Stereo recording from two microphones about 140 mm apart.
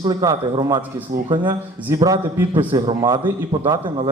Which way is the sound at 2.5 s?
35° right (ahead or behind).